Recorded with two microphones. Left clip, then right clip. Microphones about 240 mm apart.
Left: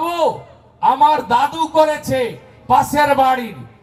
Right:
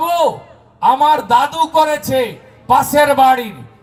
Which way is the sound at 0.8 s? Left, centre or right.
Right.